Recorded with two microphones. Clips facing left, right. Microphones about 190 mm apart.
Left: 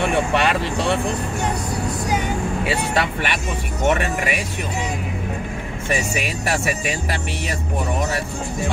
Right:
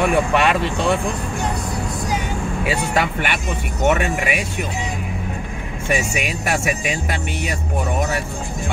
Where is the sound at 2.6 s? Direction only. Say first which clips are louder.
Right 3 dB; 30° left (ahead or behind).